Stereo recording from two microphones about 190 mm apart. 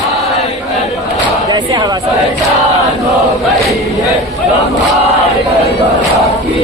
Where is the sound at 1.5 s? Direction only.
20° right (ahead or behind).